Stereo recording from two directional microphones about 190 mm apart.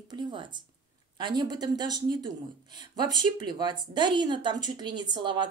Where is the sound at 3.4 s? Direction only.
25° right (ahead or behind).